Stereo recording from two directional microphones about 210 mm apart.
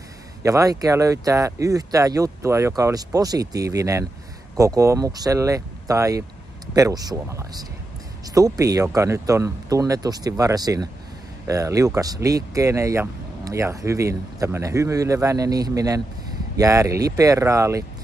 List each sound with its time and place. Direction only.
0.4 s speech: 15° right (ahead or behind)